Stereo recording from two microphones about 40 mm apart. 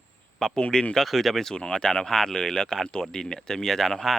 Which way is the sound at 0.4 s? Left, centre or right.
Centre.